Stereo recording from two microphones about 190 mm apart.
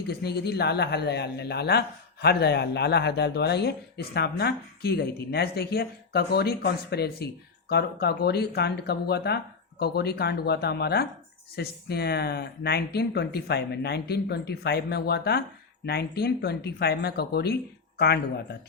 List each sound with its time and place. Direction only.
0.1 s speech: 60° left (ahead or behind)